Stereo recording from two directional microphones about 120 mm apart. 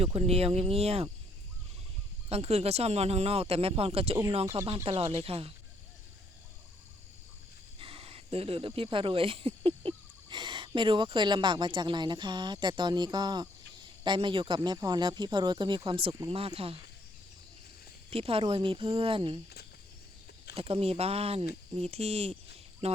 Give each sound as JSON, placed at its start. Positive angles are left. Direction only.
{"t": 0.0, "sound": "speech", "side_deg": -55}
{"t": 2.3, "sound": "speech", "side_deg": -55}
{"t": 7.8, "sound": "speech", "side_deg": -50}
{"t": 18.1, "sound": "speech", "side_deg": -50}
{"t": 20.6, "sound": "speech", "side_deg": -55}